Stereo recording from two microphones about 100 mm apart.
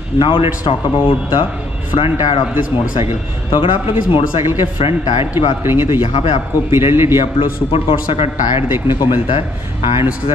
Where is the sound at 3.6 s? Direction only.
60° left (ahead or behind).